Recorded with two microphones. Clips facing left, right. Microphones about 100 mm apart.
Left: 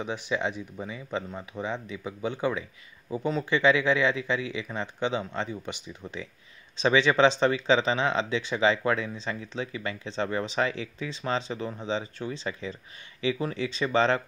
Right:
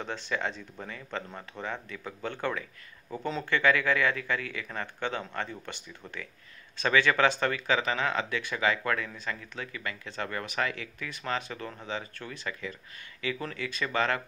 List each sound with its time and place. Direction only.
0.0 s speech: 15° left (ahead or behind)
3.5 s speech: 20° left (ahead or behind)